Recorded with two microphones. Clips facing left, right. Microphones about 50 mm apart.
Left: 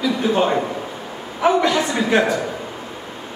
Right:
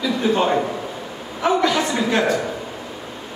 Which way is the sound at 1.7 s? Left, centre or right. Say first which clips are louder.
Left 2 dB; centre.